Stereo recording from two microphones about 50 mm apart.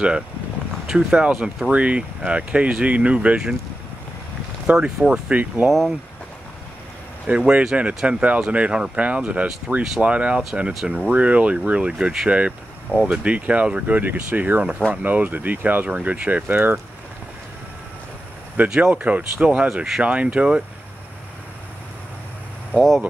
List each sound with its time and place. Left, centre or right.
0.8 s speech: centre
4.7 s speech: centre
5.3 s speech: right
5.7 s speech: centre
7.2 s speech: right
18.7 s speech: right
22.8 s speech: centre